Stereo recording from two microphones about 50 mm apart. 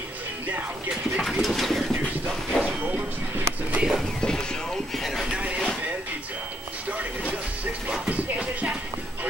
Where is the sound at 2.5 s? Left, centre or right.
Centre.